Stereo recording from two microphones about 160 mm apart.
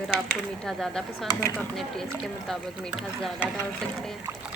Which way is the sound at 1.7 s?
Centre (ahead or behind).